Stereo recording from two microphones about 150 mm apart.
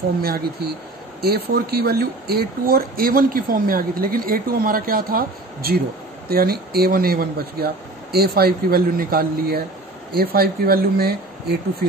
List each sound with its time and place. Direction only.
0.2 s speech: 90° right
6.2 s speech: 90° right